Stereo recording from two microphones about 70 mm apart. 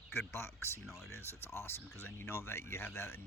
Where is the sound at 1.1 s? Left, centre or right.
Left.